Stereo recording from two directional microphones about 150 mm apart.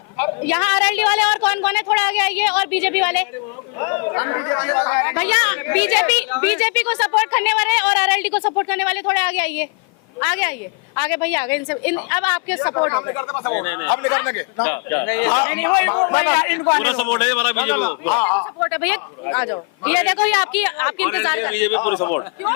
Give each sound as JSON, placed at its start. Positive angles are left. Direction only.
{"t": 0.2, "sound": "a woman's voice", "side_deg": 10}
{"t": 3.8, "sound": "a man's voice", "side_deg": 20}